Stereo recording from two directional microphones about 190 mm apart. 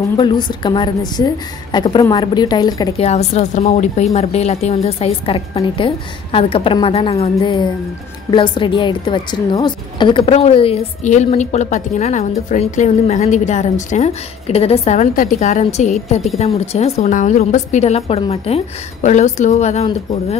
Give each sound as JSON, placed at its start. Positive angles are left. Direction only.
{"t": 0.2, "sound": "a woman's voice", "side_deg": 25}
{"t": 3.1, "sound": "a woman's voice", "side_deg": 35}